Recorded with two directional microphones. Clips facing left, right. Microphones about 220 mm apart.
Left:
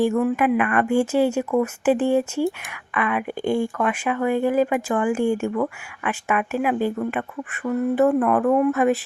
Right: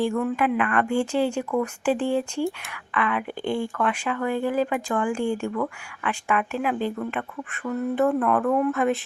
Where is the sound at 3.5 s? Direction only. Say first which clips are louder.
Left 2 dB; 10° left (ahead or behind).